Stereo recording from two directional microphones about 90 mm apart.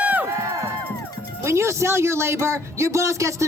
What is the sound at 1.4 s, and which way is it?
Speech, 30° right (ahead or behind).